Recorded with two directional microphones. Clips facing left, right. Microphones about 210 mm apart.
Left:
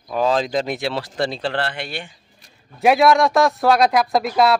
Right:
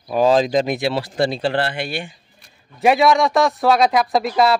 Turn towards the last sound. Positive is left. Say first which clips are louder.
# even
turn(degrees=0)  # may be behind; listen again after turning